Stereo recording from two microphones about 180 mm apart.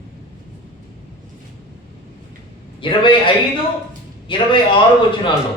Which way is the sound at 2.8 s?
25° left (ahead or behind).